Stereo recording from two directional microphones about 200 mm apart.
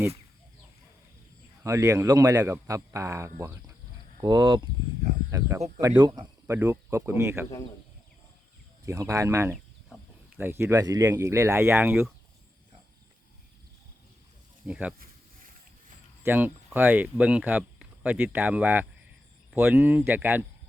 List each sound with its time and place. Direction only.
1.6 s speech: 15° right (ahead or behind)
8.9 s speech: 15° right (ahead or behind)
14.7 s speech: 5° right (ahead or behind)
14.9 s insect: 45° right (ahead or behind)
16.2 s speech: 10° right (ahead or behind)